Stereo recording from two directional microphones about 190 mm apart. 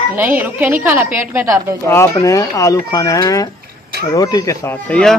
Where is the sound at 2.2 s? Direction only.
15° left (ahead or behind).